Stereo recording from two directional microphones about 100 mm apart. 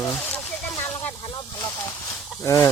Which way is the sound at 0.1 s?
15° left (ahead or behind).